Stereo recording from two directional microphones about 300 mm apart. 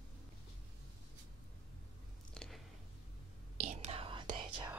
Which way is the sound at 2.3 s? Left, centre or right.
Centre.